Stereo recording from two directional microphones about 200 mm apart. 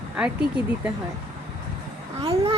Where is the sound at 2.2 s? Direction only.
25° right (ahead or behind).